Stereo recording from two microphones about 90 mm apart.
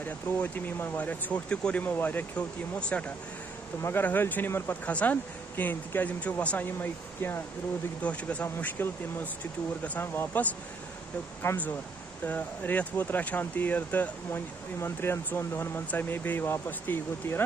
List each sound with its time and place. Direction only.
0.0 s speech: 20° left (ahead or behind)